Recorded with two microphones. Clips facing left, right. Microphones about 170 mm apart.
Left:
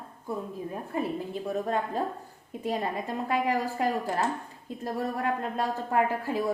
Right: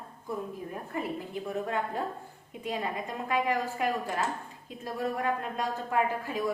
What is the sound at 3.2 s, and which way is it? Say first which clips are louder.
Speech: left 1 dB; 35° left (ahead or behind).